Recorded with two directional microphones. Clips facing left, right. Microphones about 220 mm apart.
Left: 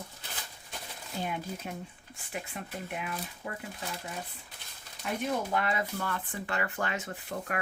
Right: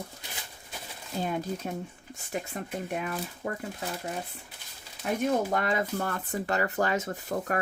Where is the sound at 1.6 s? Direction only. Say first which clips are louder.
Right 5 dB; 35° right (ahead or behind).